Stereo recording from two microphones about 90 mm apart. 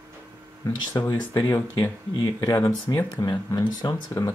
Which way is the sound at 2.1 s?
45° left (ahead or behind).